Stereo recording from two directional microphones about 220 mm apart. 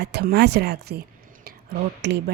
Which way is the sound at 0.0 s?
45° right (ahead or behind).